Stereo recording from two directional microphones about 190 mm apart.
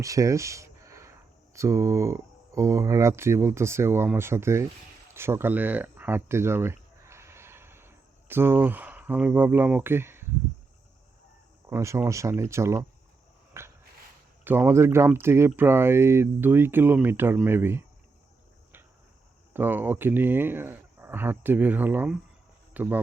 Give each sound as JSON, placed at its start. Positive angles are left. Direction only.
{"t": 0.0, "sound": "speech", "side_deg": -15}
{"t": 5.1, "sound": "a sound", "side_deg": -15}
{"t": 11.7, "sound": "speech", "side_deg": -15}
{"t": 13.6, "sound": "dog", "side_deg": -15}
{"t": 14.4, "sound": "speech", "side_deg": -10}
{"t": 19.5, "sound": "speech", "side_deg": -10}